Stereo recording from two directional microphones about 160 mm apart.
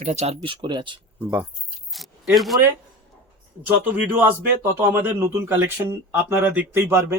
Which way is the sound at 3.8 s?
10° right (ahead or behind).